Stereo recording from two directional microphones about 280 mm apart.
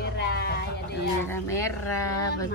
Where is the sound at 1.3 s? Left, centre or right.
Centre.